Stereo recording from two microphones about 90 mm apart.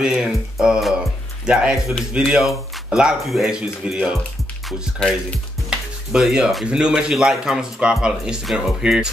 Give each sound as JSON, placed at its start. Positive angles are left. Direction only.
{"t": 0.0, "sound": "music", "side_deg": -5}
{"t": 1.4, "sound": "speech", "side_deg": -10}